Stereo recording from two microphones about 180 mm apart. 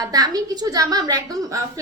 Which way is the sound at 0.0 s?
20° right (ahead or behind).